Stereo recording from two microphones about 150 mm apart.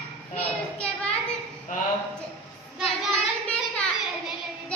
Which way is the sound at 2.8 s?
5° left (ahead or behind).